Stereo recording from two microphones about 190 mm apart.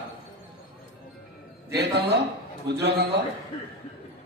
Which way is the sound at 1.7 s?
60° right (ahead or behind).